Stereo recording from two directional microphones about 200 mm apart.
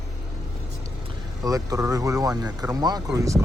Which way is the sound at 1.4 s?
15° right (ahead or behind).